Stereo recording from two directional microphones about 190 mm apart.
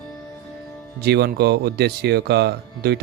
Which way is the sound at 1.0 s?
60° right (ahead or behind).